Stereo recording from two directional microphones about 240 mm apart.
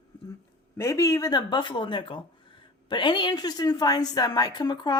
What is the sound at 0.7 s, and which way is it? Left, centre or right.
Speech, centre.